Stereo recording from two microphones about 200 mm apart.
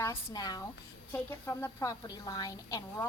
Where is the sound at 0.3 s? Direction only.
20° left (ahead or behind).